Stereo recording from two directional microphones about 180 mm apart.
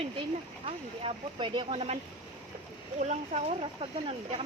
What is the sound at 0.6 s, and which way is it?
Speech, 30° right (ahead or behind).